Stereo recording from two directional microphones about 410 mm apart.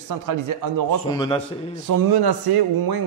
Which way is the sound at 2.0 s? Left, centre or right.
Right.